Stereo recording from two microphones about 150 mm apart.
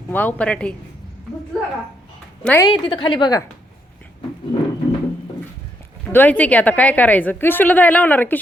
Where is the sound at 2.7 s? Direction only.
35° left (ahead or behind).